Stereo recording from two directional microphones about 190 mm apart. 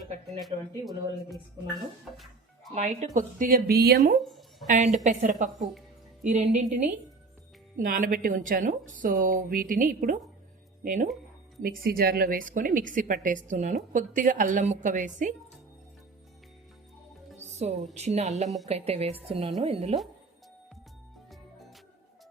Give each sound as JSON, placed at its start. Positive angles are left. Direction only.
{"t": 0.3, "sound": "speech", "side_deg": 0}
{"t": 2.1, "sound": "music", "side_deg": 0}
{"t": 2.7, "sound": "a woman's voice", "side_deg": -40}
{"t": 4.2, "sound": "speech", "side_deg": 0}
{"t": 4.6, "sound": "a woman's voice", "side_deg": -40}
{"t": 17.3, "sound": "music", "side_deg": -35}
{"t": 17.9, "sound": "a woman's voice", "side_deg": -35}